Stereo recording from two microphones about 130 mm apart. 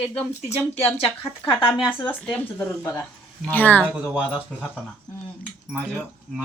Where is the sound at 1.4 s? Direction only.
15° left (ahead or behind).